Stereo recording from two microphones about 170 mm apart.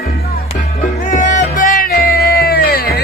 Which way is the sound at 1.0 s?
50° left (ahead or behind).